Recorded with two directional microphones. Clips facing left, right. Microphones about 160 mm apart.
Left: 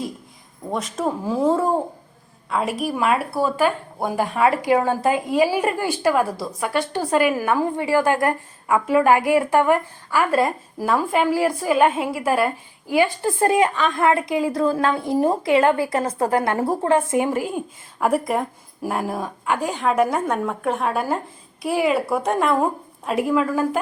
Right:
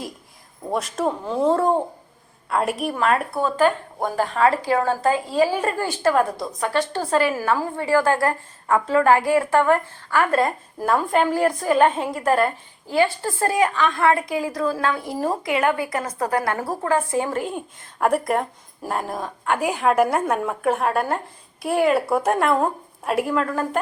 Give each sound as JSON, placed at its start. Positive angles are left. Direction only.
{"t": 0.7, "sound": "a woman's voice", "side_deg": 0}
{"t": 18.0, "sound": "speech", "side_deg": 0}
{"t": 19.5, "sound": "speech", "side_deg": -5}